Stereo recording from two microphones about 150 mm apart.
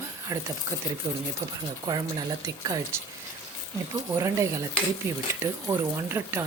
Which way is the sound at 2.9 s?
15° right (ahead or behind).